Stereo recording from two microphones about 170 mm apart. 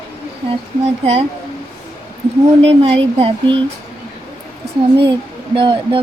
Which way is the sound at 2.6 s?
35° right (ahead or behind).